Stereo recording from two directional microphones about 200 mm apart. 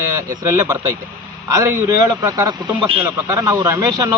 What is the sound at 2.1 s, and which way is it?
A man's voice, 15° right (ahead or behind).